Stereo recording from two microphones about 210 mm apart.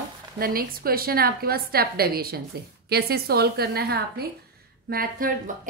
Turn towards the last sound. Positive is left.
turn(degrees=-45)  # may be behind; listen again after turning